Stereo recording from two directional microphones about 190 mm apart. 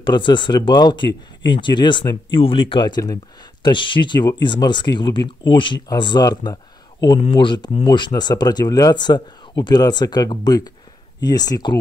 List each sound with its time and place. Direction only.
0.0 s speech: 25° left (ahead or behind)